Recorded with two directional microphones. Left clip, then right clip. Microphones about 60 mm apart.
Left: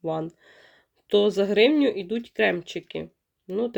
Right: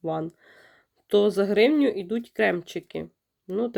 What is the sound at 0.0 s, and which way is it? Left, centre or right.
Speech, centre.